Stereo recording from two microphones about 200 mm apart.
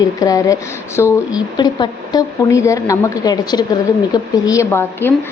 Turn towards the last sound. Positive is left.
turn(degrees=10)  # may be behind; listen again after turning